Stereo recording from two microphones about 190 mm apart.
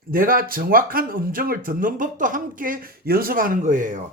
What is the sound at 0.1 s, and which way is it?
Speech, 50° right (ahead or behind).